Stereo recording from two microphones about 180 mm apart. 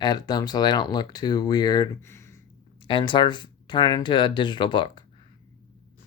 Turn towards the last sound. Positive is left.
turn(degrees=25)  # may be behind; listen again after turning